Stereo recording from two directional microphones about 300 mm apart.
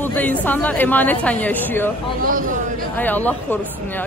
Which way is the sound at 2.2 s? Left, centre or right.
Right.